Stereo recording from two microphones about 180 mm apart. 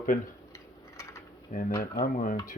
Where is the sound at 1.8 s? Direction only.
50° left (ahead or behind).